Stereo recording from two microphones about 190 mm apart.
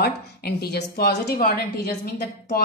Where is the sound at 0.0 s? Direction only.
55° left (ahead or behind).